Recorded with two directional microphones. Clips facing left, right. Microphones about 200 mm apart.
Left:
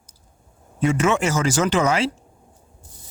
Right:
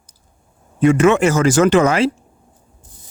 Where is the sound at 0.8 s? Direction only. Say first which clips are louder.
Right 7 dB; 60° right (ahead or behind).